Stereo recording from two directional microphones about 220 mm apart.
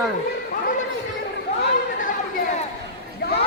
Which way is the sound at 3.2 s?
45° left (ahead or behind).